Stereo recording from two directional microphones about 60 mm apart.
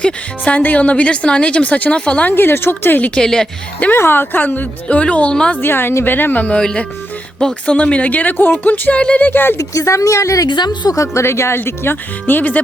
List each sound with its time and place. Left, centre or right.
0.0 s a woman's voice: left
2.3 s speech: left
3.2 s speech: centre
3.9 s a woman's voice: left; by 5.5 s centre
5.5 s speech: left
6.4 s a woman's voice: centre
9.3 s speech: left
9.6 s speech: left
11.0 s speech: left
12.2 s a woman's voice: left